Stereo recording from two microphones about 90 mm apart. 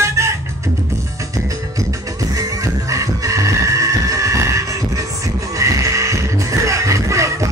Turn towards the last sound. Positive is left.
turn(degrees=-35)  # may be behind; listen again after turning